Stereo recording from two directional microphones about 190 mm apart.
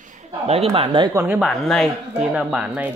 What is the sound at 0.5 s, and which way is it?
Speech, 30° right (ahead or behind).